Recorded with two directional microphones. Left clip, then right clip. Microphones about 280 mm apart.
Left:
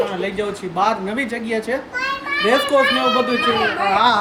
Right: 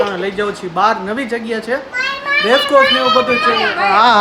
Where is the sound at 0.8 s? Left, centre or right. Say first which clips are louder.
Right 4 dB; centre.